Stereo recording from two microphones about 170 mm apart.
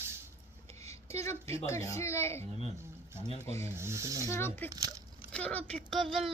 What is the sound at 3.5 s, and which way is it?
Speech, 15° left (ahead or behind).